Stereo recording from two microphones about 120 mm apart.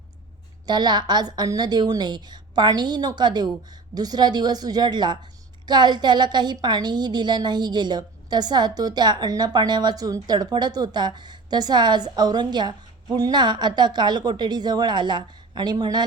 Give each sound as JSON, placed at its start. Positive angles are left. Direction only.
{"t": 0.6, "sound": "a woman's voice", "side_deg": -35}